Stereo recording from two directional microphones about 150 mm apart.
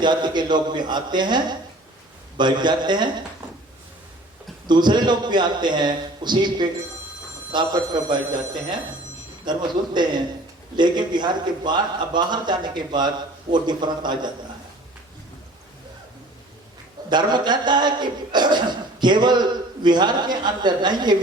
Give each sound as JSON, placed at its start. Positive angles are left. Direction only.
{"t": 0.0, "sound": "a man's voice", "side_deg": -30}
{"t": 4.6, "sound": "a man's voice", "side_deg": -30}
{"t": 9.5, "sound": "a man's voice", "side_deg": -30}
{"t": 17.1, "sound": "a man's voice", "side_deg": -30}